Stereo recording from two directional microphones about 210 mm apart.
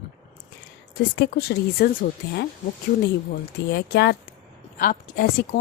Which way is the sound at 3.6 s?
50° left (ahead or behind).